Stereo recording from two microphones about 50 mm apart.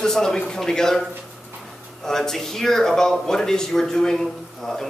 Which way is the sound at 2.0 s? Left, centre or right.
Centre.